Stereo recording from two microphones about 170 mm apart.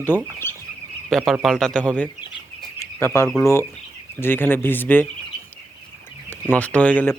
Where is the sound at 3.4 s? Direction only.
15° left (ahead or behind).